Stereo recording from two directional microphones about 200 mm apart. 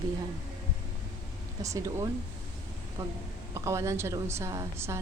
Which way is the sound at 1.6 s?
15° right (ahead or behind).